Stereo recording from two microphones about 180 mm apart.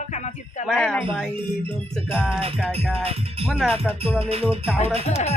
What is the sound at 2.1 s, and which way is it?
Speech, 5° right (ahead or behind).